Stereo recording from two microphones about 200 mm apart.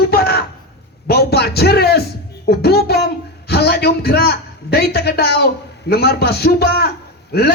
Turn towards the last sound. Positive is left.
turn(degrees=50)  # may be behind; listen again after turning